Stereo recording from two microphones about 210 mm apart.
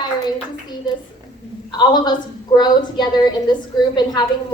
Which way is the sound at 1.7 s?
20° left (ahead or behind).